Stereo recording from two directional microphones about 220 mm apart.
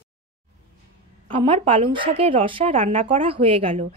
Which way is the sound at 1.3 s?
25° right (ahead or behind).